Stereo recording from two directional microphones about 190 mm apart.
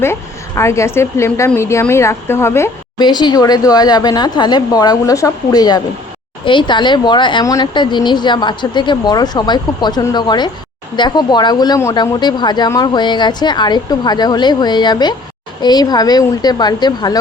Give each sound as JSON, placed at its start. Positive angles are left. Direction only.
{"t": 0.0, "sound": "a woman's voice", "side_deg": 15}